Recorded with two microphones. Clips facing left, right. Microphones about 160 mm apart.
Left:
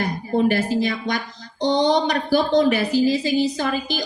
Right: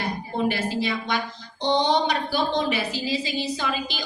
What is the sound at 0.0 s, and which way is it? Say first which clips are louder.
A woman's voice: left 6 dB; 45° left (ahead or behind).